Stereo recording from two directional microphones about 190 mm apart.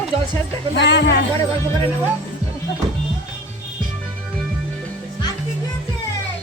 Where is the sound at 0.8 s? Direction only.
65° left (ahead or behind).